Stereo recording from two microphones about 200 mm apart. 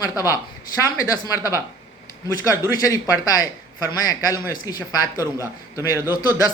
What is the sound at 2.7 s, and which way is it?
A man's voice, 20° left (ahead or behind).